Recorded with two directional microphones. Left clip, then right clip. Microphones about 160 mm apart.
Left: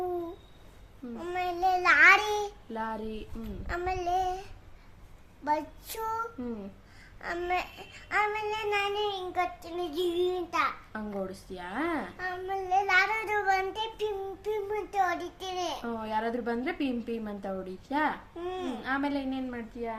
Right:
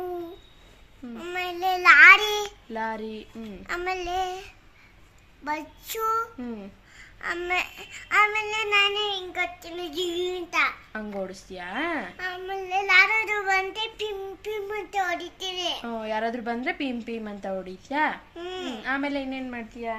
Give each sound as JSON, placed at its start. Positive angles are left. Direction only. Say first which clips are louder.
{"t": 1.2, "sound": "child singing", "louder": "right 1 dB", "side_deg": 5}
{"t": 2.7, "sound": "a woman's voice", "louder": "right 5 dB", "side_deg": -30}
{"t": 3.7, "sound": "babbling", "louder": "right 1 dB", "side_deg": 10}
{"t": 5.5, "sound": "babbling", "louder": "left 1 dB", "side_deg": 15}
{"t": 10.9, "sound": "a woman's voice", "louder": "right 3 dB", "side_deg": -30}
{"t": 12.1, "sound": "babbling", "louder": "right 2 dB", "side_deg": 10}
{"t": 15.9, "sound": "a woman's voice", "louder": "right 3 dB", "side_deg": -30}
{"t": 18.3, "sound": "speech", "louder": "right 1 dB", "side_deg": 5}
{"t": 18.8, "sound": "a woman's voice", "louder": "right 4 dB", "side_deg": -35}